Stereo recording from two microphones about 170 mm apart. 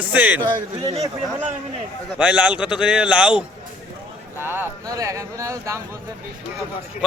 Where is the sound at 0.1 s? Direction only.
10° right (ahead or behind).